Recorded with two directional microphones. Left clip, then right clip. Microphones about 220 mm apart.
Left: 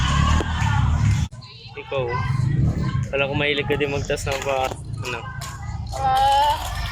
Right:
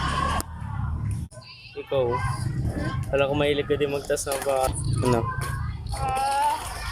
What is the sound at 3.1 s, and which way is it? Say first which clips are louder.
Speech: left 1 dB; 10° right (ahead or behind).